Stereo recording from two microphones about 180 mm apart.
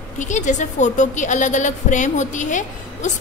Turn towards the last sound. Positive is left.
turn(degrees=45)  # may be behind; listen again after turning